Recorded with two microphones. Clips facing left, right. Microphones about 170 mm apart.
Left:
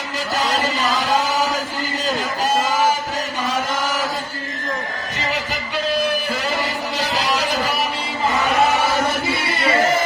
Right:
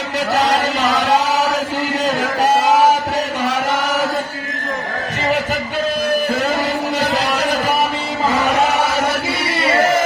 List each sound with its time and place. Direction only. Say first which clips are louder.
0.3 s chant: right 4 dB; 65° right (ahead or behind)
2.4 s a sound: right 6 dB; 65° right (ahead or behind)
3.4 s chant: right 2 dB; 65° right (ahead or behind)
7.0 s music: even; 60° right (ahead or behind)